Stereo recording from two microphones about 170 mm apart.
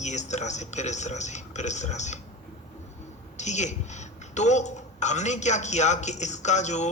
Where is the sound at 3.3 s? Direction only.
45° left (ahead or behind).